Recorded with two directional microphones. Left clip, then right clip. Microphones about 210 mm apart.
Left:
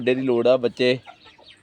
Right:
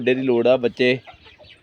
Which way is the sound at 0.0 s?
15° right (ahead or behind).